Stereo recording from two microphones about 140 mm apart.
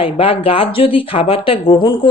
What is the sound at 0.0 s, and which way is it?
Speech, 40° left (ahead or behind).